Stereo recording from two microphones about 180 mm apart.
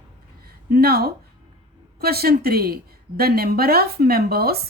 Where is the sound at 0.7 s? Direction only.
60° right (ahead or behind).